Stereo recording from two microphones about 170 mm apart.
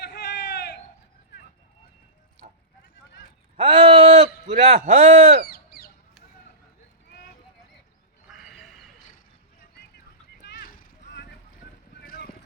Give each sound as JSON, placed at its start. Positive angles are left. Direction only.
{"t": 0.0, "sound": "a sound", "side_deg": 75}
{"t": 2.4, "sound": "vehicle", "side_deg": -40}
{"t": 3.6, "sound": "a man's voice", "side_deg": -35}
{"t": 5.5, "sound": "bird", "side_deg": 65}
{"t": 7.1, "sound": "clip-clop", "side_deg": 70}
{"t": 8.3, "sound": "a sound", "side_deg": 0}
{"t": 10.4, "sound": "vehicle", "side_deg": 65}
{"t": 11.9, "sound": "boat", "side_deg": 65}